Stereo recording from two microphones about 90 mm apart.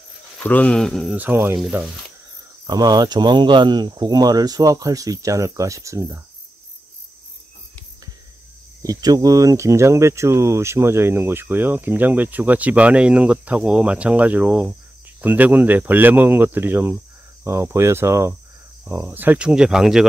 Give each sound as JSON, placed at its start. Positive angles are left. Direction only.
{"t": 0.4, "sound": "speech", "side_deg": 15}
{"t": 1.1, "sound": "speech", "side_deg": -20}
{"t": 2.6, "sound": "cricket", "side_deg": -50}
{"t": 8.8, "sound": "speech", "side_deg": -40}